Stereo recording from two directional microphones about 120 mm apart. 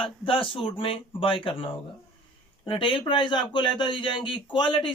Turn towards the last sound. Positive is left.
turn(degrees=40)  # may be behind; listen again after turning